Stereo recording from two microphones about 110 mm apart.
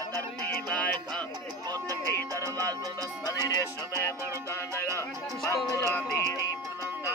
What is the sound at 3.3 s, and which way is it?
Music, 35° left (ahead or behind).